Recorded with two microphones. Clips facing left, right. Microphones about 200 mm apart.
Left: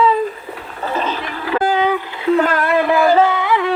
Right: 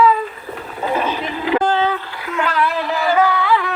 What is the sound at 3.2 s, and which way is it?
Yodeling, 20° left (ahead or behind).